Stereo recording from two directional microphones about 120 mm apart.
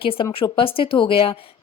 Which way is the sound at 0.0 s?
50° left (ahead or behind).